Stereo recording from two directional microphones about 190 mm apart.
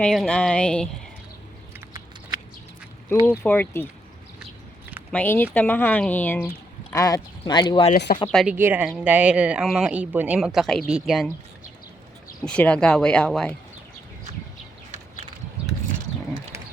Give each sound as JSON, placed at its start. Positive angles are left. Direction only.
{"t": 0.0, "sound": "speech", "side_deg": 5}
{"t": 3.2, "sound": "a woman's voice", "side_deg": 10}
{"t": 5.1, "sound": "a woman's voice", "side_deg": 10}
{"t": 8.3, "sound": "speech", "side_deg": 0}
{"t": 12.5, "sound": "speech", "side_deg": 5}
{"t": 15.6, "sound": "a sound", "side_deg": -5}